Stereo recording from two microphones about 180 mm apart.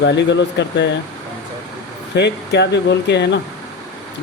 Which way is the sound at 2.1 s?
70° left (ahead or behind).